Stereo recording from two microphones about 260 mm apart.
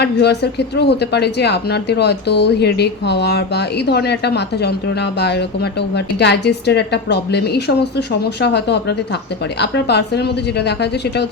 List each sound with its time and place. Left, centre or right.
0.0 s speech: left